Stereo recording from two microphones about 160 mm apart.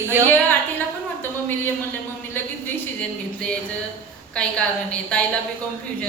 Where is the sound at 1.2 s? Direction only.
10° left (ahead or behind).